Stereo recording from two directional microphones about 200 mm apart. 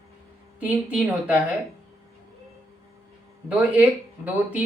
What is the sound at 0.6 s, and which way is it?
Speech, 10° right (ahead or behind).